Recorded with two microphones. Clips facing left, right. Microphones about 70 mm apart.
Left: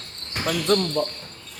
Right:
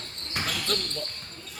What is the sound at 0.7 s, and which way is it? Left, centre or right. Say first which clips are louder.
Speech: left 11 dB; left.